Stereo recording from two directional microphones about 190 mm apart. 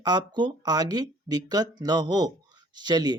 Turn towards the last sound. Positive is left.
turn(degrees=-20)  # may be behind; listen again after turning